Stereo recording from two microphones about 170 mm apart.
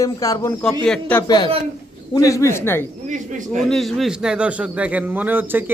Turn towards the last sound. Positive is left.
turn(degrees=-10)  # may be behind; listen again after turning